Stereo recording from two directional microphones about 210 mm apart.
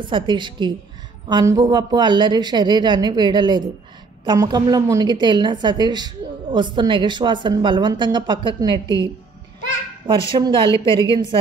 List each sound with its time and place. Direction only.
0.0 s a woman's voice: 25° right (ahead or behind)
10.3 s a woman's voice: 25° right (ahead or behind)